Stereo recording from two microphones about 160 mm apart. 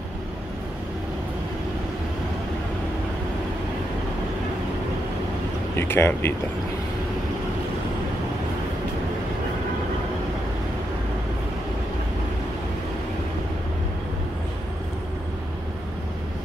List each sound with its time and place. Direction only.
5.8 s speech: 15° left (ahead or behind)